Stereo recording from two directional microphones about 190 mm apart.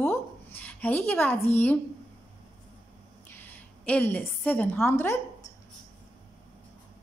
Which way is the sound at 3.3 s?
10° left (ahead or behind).